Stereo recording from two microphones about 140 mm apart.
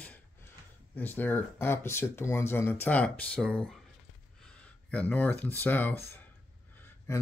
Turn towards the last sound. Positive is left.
turn(degrees=15)  # may be behind; listen again after turning